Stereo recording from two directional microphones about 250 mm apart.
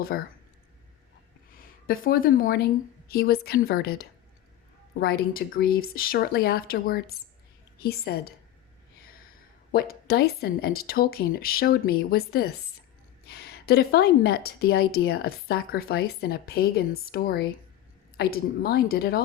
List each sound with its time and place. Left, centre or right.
0.1 s a woman's voice: left
1.5 s a woman's voice: left
9.7 s a woman's voice: left